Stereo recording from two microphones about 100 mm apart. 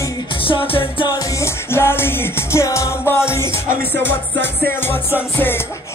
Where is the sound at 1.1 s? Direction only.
35° left (ahead or behind).